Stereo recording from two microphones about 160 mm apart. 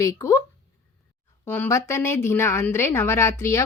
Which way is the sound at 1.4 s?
15° left (ahead or behind).